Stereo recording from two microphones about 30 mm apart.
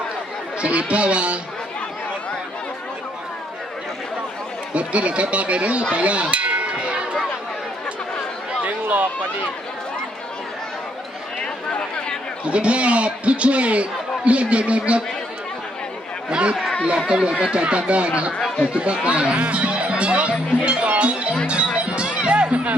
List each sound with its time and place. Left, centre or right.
0.6 s speech: right
4.7 s a man's voice: right
6.3 s a sound: right
8.6 s a sound: right
12.5 s a man's voice: right
16.3 s speech: right
20.6 s music: right